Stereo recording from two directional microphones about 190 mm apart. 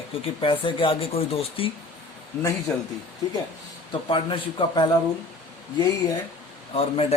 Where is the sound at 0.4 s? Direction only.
25° left (ahead or behind).